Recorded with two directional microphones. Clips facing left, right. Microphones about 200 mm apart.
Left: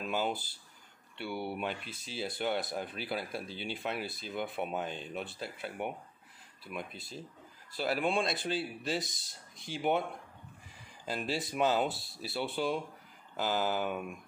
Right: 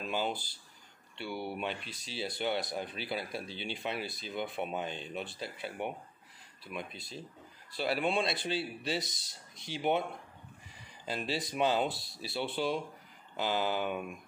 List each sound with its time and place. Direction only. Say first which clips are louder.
0.0 s a sound: left 1 dB; 5° left (ahead or behind)
1.2 s speech: left 1 dB; 5° left (ahead or behind)
1.9 s speech: left 1 dB; 50° left (ahead or behind)
2.2 s speech: even; centre (ahead or behind)
11.3 s speech: even; 5° left (ahead or behind)